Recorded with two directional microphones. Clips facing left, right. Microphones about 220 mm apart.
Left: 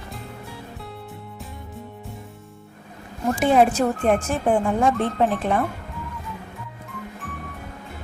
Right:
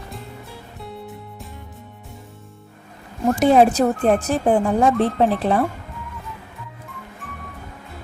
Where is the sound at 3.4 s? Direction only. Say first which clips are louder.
Right 3 dB; 40° right (ahead or behind).